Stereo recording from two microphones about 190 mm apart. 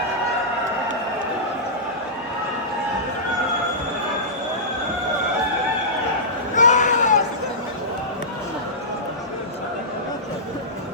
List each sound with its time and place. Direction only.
6.6 s baby cry: 40° left (ahead or behind)